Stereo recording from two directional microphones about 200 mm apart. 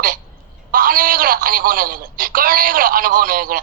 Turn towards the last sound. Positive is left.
turn(degrees=-45)  # may be behind; listen again after turning